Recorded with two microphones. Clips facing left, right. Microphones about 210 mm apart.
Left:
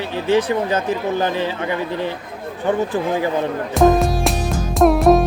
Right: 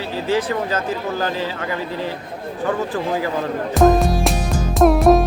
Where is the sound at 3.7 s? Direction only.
Centre (ahead or behind).